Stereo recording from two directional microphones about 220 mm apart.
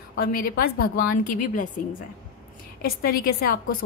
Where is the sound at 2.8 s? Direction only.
45° left (ahead or behind).